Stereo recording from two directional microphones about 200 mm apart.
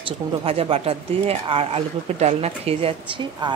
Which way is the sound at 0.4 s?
30° right (ahead or behind).